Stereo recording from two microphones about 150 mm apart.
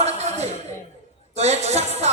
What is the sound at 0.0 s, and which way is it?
Music, 45° right (ahead or behind).